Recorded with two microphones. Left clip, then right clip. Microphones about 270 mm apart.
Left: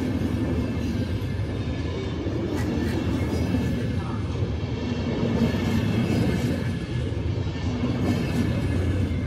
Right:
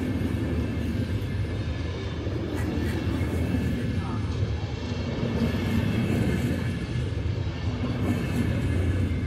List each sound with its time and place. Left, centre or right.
5.2 s train: left
7.8 s music: left